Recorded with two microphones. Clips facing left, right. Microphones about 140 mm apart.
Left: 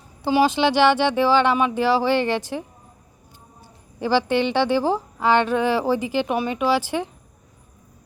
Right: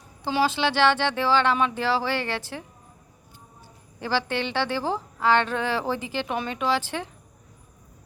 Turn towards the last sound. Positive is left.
turn(degrees=10)  # may be behind; listen again after turning